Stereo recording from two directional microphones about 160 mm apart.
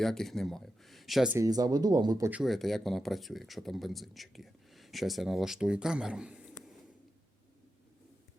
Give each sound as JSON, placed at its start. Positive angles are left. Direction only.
{"t": 0.0, "sound": "speech", "side_deg": 0}
{"t": 1.4, "sound": "speech", "side_deg": -25}
{"t": 2.3, "sound": "speech", "side_deg": 0}